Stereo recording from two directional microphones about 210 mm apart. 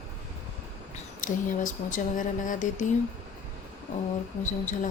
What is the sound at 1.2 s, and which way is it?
Speech, 35° left (ahead or behind).